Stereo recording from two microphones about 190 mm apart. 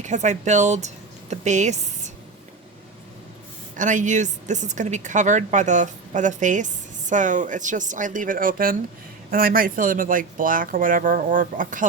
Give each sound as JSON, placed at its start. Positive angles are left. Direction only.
{"t": 0.0, "sound": "speech", "side_deg": -40}
{"t": 3.8, "sound": "speech", "side_deg": -40}